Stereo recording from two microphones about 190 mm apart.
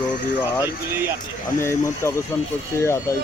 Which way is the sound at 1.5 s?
15° left (ahead or behind).